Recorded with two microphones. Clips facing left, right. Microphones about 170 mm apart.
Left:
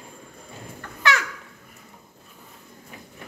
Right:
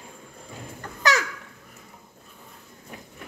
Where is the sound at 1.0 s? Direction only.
40° right (ahead or behind).